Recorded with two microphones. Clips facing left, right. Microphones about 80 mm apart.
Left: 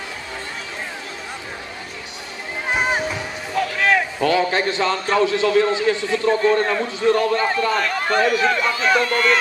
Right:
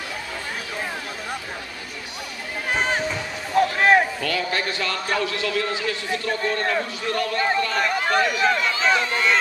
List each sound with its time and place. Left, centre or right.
2.7 s music: centre
3.5 s a sound: right
4.2 s a man's voice: left
6.6 s speech: centre
7.1 s a man's voice: left
7.8 s speech: centre
9.0 s speech: centre